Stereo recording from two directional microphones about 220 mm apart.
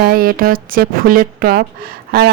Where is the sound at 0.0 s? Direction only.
40° right (ahead or behind).